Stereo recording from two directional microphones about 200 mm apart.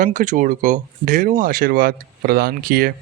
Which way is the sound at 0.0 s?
40° right (ahead or behind).